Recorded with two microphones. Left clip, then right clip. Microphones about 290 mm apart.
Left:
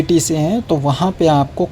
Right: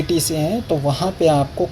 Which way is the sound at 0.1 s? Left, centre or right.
Left.